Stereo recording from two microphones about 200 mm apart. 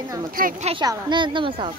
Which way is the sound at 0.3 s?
45° right (ahead or behind).